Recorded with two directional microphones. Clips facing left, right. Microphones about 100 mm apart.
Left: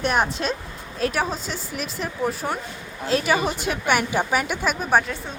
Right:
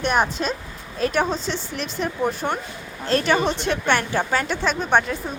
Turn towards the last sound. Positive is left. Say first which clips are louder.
# right 1 dB
turn(degrees=0)  # may be behind; listen again after turning